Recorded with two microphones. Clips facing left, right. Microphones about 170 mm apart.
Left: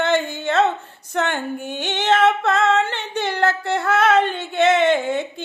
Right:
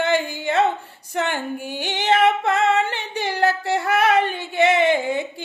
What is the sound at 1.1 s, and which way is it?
Female singing, 10° right (ahead or behind).